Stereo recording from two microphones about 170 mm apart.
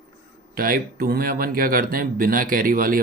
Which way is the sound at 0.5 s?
60° right (ahead or behind).